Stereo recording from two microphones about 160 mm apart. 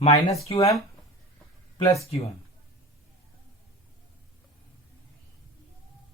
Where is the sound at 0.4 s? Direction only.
40° left (ahead or behind).